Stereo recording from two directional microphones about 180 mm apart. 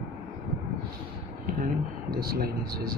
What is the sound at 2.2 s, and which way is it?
Speech, 55° right (ahead or behind).